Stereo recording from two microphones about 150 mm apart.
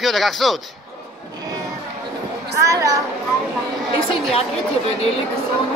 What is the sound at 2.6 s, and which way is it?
Speech, 20° right (ahead or behind).